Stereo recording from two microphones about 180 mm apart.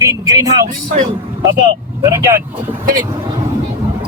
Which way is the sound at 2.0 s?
15° right (ahead or behind).